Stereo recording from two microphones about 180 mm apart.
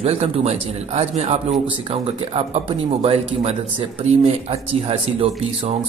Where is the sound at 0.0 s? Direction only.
35° right (ahead or behind).